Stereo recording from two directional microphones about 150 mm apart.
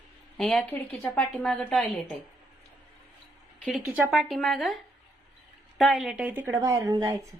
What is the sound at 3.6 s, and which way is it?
A woman's voice, 5° right (ahead or behind).